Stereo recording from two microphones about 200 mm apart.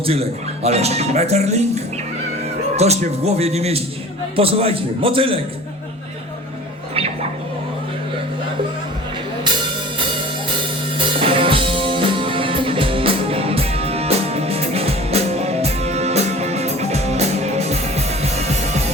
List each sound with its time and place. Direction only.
0.0 s speech: 30° right (ahead or behind)
2.7 s a man's voice: 30° right (ahead or behind)
6.9 s music: 30° right (ahead or behind)
10.9 s music: 25° right (ahead or behind)